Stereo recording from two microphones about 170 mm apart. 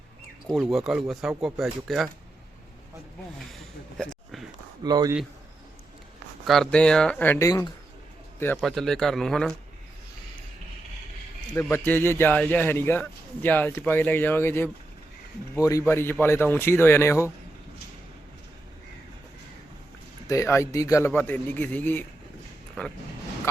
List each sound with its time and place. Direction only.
0.4 s speech: centre (ahead or behind)
3.9 s a sound: 5° left (ahead or behind)
4.8 s speech: 25° right (ahead or behind)
6.4 s speech: centre (ahead or behind); by 7.7 s 20° left (ahead or behind)
8.6 s speech: centre (ahead or behind)
11.5 s a man's voice: 15° left (ahead or behind)
20.2 s a man's voice: 15° left (ahead or behind)